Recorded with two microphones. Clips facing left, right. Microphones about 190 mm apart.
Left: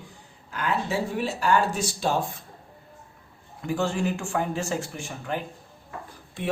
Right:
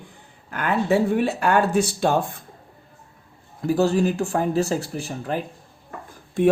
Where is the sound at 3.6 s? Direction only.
40° right (ahead or behind).